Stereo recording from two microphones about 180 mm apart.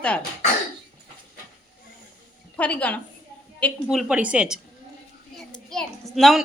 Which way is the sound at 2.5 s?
10° left (ahead or behind).